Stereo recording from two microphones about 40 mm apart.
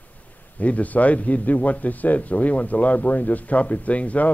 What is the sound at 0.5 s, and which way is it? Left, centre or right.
Speech, left.